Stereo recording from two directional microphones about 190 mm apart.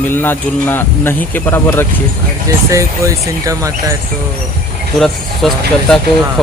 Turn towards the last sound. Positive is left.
turn(degrees=0)  # may be behind; listen again after turning